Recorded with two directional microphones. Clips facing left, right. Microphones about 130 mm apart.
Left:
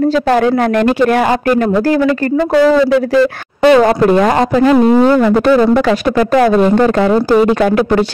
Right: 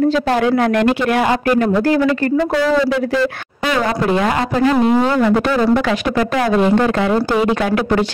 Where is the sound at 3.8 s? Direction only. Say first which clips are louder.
Left 7 dB; 45° left (ahead or behind).